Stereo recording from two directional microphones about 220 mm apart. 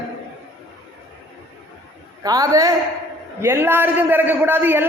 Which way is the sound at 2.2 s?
15° right (ahead or behind).